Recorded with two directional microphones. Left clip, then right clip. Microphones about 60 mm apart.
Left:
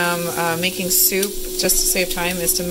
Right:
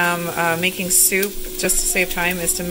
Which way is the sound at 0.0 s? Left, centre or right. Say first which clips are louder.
Right 1 dB; centre.